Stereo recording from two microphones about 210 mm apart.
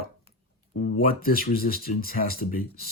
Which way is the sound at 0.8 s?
45° left (ahead or behind).